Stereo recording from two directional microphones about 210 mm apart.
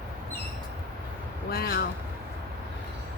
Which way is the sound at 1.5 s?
50° left (ahead or behind).